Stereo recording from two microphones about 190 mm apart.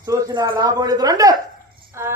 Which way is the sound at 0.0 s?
20° right (ahead or behind).